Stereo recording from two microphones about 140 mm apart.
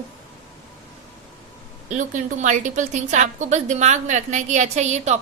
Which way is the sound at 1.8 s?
60° right (ahead or behind).